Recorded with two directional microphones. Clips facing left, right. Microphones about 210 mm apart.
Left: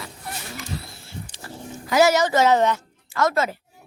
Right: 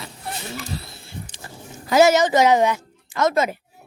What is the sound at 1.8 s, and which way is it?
A woman's voice, 25° right (ahead or behind).